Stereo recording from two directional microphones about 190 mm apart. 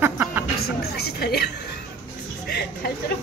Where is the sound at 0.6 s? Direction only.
55° left (ahead or behind).